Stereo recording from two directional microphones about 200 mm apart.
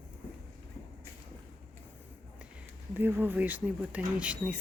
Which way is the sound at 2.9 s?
10° right (ahead or behind).